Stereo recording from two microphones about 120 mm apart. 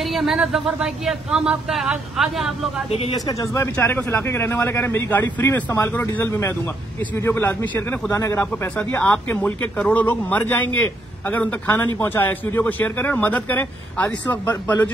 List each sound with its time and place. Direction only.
0.0 s speech: centre (ahead or behind)
2.9 s speech: 60° left (ahead or behind)
3.3 s speech: 25° left (ahead or behind)
8.1 s a man's voice: 25° left (ahead or behind)